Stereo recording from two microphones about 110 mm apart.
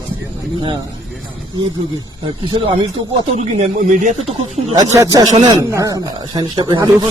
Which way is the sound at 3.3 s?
80° right.